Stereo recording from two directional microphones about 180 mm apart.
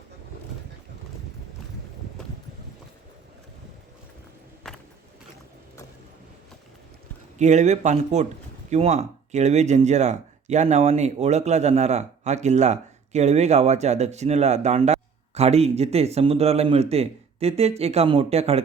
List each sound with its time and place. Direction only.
4.7 s vehicle: centre (ahead or behind)
7.3 s speech: 40° right (ahead or behind)